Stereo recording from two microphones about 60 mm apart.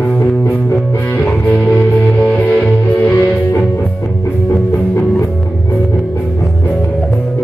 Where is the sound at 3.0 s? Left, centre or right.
Left.